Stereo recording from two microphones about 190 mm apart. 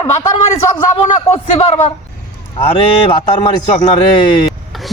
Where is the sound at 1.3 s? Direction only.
35° left (ahead or behind).